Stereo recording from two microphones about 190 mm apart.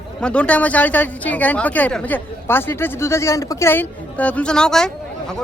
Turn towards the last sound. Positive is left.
turn(degrees=5)  # may be behind; listen again after turning